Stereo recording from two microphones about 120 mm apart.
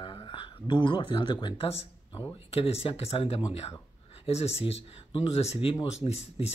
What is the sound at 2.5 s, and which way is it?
Speech, 55° left (ahead or behind).